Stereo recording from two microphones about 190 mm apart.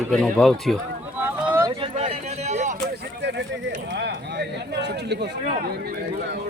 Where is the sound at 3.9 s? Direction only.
65° right (ahead or behind).